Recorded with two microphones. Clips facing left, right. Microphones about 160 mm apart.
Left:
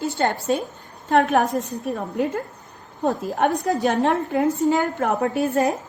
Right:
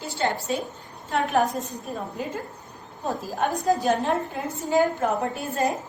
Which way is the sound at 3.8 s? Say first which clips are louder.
Left 3 dB; 65° left (ahead or behind).